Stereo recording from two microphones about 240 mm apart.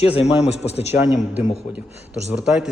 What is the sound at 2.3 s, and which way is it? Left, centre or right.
Speech, centre.